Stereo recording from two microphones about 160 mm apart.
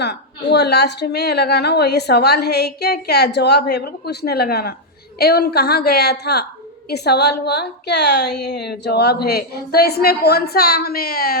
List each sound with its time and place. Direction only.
0.0 s a woman's voice: 90° left
5.2 s a woman's voice: 85° left; by 11.3 s 70° left (ahead or behind)